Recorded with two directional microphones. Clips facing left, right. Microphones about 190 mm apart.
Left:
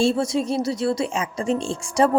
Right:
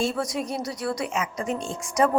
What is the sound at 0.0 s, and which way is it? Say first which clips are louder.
A woman's voice: left 6 dB; 25° left (ahead or behind).